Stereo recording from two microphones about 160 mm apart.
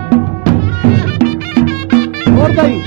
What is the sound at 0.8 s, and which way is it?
Music, 65° right (ahead or behind).